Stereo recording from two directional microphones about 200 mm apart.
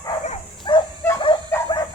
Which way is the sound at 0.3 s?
25° left (ahead or behind).